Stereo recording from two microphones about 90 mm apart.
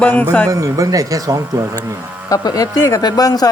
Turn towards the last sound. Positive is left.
turn(degrees=45)  # may be behind; listen again after turning